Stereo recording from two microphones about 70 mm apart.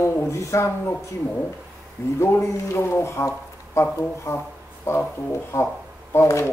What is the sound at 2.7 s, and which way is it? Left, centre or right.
Speech, left.